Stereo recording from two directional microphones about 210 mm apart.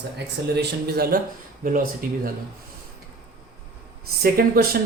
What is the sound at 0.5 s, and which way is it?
Speech, 45° right (ahead or behind).